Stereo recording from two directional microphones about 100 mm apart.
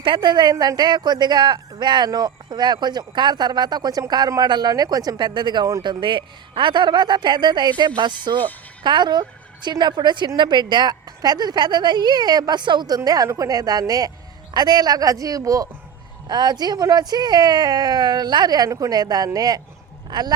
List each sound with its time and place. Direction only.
0.0 s speech: 55° right (ahead or behind)
0.5 s speech: 40° right (ahead or behind)
13.1 s speech: 35° right (ahead or behind)